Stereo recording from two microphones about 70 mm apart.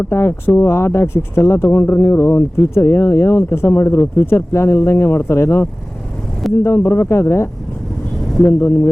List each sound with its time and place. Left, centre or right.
0.0 s speech: left